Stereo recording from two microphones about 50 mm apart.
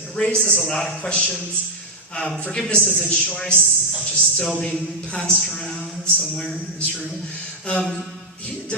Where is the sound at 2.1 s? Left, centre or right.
Centre.